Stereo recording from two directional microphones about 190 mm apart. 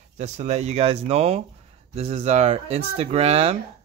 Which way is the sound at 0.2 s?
35° right (ahead or behind).